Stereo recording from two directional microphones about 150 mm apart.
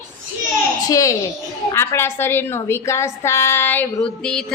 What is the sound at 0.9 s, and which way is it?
A woman's voice, 20° left (ahead or behind).